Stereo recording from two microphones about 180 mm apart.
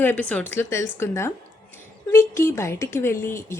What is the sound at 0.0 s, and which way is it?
Speech, 10° left (ahead or behind).